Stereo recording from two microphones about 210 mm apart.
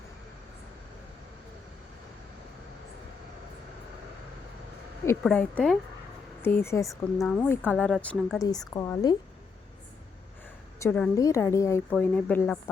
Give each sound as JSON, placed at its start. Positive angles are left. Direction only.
{"t": 5.2, "sound": "a woman's voice", "side_deg": 5}
{"t": 8.7, "sound": "a woman's voice", "side_deg": 15}
{"t": 10.8, "sound": "a woman's voice", "side_deg": 10}